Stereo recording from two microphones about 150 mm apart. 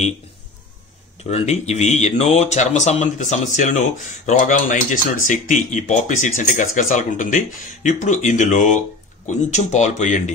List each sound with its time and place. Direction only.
1.2 s speech: 50° left (ahead or behind)